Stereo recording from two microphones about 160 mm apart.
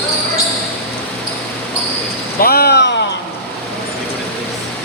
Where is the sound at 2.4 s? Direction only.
75° left (ahead or behind).